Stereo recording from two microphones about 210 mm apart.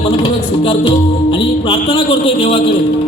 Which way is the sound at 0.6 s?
25° left (ahead or behind).